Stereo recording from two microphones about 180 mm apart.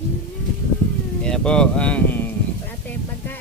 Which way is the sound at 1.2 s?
5° left (ahead or behind).